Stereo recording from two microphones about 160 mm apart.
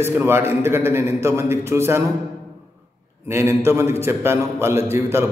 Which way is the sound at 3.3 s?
15° right (ahead or behind).